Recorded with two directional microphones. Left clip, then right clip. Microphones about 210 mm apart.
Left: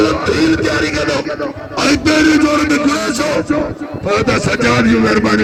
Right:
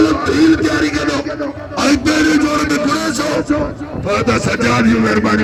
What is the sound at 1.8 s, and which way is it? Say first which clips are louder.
A man's voice: left 2 dB; 40° left (ahead or behind).